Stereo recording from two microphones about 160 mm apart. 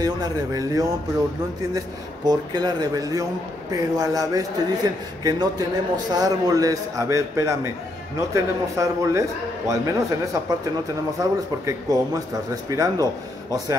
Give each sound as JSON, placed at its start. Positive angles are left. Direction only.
{"t": 0.0, "sound": "a man's voice", "side_deg": -25}
{"t": 2.2, "sound": "a man's voice", "side_deg": -25}